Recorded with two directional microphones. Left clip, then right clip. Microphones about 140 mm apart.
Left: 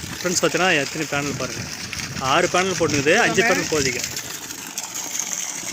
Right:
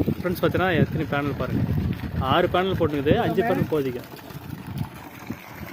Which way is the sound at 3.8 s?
65° right (ahead or behind).